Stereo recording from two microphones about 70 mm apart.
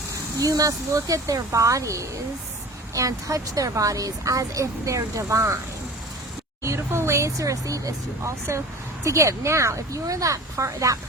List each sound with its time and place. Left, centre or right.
0.3 s speech: right
6.7 s speech: right